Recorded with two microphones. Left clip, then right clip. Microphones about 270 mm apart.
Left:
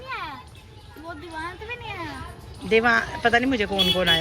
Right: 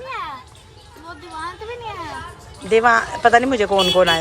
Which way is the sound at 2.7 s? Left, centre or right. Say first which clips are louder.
Right 5 dB; centre.